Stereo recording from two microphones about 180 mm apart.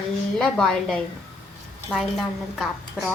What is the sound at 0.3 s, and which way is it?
Speech, 5° left (ahead or behind).